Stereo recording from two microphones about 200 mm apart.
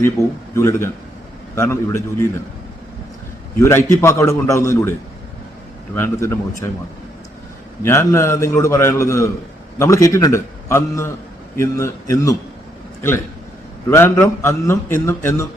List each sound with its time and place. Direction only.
0.2 s a man's voice: 15° left (ahead or behind)
3.6 s a man's voice: 15° left (ahead or behind)
7.8 s a man's voice: 15° left (ahead or behind)
13.9 s a man's voice: 10° left (ahead or behind)